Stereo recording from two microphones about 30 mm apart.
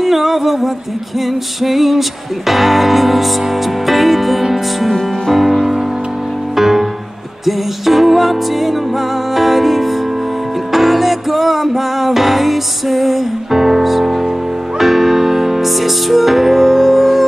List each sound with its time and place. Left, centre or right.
0.0 s music: centre
0.4 s a sound: centre
1.2 s music: centre